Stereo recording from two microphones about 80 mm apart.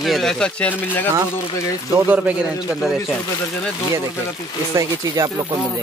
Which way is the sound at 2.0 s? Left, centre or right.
Centre.